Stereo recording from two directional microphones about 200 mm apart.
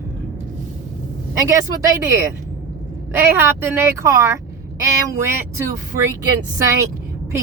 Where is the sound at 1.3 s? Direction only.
15° right (ahead or behind).